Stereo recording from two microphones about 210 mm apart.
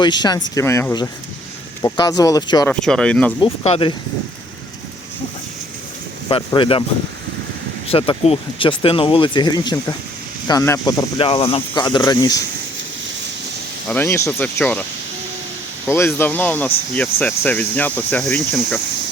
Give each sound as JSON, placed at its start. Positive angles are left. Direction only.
{"t": 0.0, "sound": "speech", "side_deg": 20}
{"t": 2.8, "sound": "speech", "side_deg": 5}
{"t": 3.4, "sound": "speech", "side_deg": 25}
{"t": 6.2, "sound": "speech", "side_deg": 20}
{"t": 7.9, "sound": "speech", "side_deg": 25}
{"t": 13.8, "sound": "speech", "side_deg": 10}
{"t": 15.9, "sound": "speech", "side_deg": 10}